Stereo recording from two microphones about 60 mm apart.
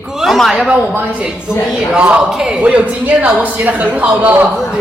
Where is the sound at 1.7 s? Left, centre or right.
Centre.